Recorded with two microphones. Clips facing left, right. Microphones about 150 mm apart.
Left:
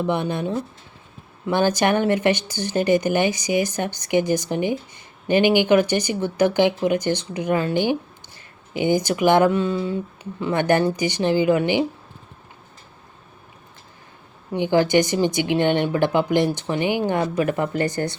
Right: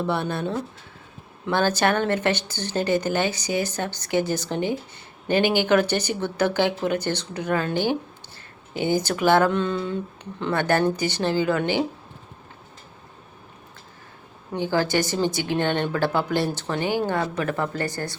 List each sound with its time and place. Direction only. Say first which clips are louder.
0.0 s speech: left 2 dB; 15° left (ahead or behind)
14.5 s speech: left 5 dB; 15° left (ahead or behind)